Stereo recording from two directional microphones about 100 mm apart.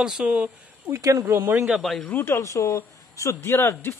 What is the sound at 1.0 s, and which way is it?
Speech, 35° right (ahead or behind).